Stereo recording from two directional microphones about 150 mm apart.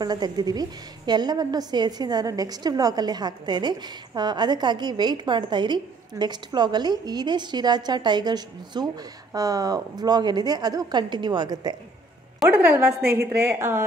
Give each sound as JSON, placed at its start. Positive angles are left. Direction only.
{"t": 0.0, "sound": "a woman's voice", "side_deg": -25}
{"t": 12.4, "sound": "a woman's voice", "side_deg": -10}